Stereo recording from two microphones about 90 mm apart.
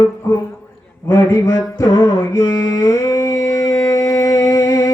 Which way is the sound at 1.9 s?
55° left (ahead or behind).